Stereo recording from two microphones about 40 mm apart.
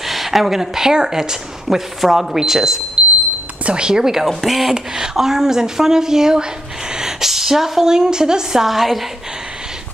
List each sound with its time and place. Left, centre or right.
0.0 s a woman's voice: centre
3.6 s a woman's voice: right
8.6 s speech: centre